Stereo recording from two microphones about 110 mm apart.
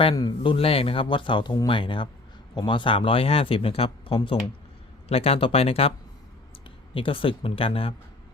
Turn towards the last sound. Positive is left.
turn(degrees=55)  # may be behind; listen again after turning